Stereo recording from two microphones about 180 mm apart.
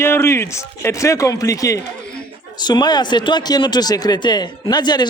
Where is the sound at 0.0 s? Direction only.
15° left (ahead or behind).